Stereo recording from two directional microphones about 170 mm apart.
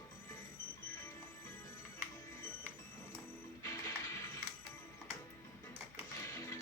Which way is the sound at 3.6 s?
20° left (ahead or behind).